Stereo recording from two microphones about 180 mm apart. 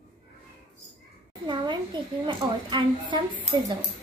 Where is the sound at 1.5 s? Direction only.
25° right (ahead or behind).